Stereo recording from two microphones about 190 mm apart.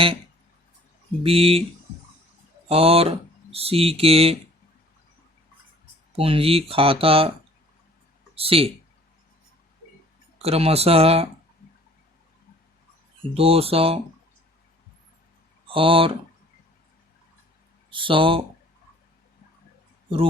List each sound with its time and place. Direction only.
1.2 s speech: 30° right (ahead or behind)
2.6 s speech: 30° right (ahead or behind)
6.1 s speech: 30° right (ahead or behind)
8.4 s speech: 30° right (ahead or behind)
10.3 s speech: 30° right (ahead or behind)
13.3 s speech: 30° right (ahead or behind)
15.7 s speech: 30° right (ahead or behind)
17.9 s speech: 25° right (ahead or behind)